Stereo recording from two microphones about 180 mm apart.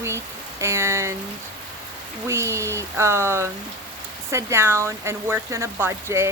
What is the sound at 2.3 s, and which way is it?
Speech, 15° right (ahead or behind).